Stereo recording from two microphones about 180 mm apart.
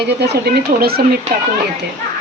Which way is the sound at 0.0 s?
65° right (ahead or behind).